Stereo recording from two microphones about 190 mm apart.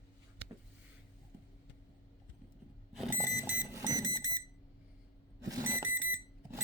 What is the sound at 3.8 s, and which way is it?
Alarm clock, 20° right (ahead or behind).